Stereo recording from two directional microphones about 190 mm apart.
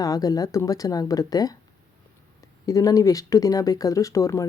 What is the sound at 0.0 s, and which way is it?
Speech, 20° left (ahead or behind).